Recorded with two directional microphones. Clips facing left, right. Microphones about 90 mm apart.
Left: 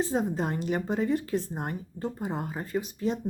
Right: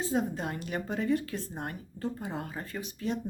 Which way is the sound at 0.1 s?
25° left (ahead or behind).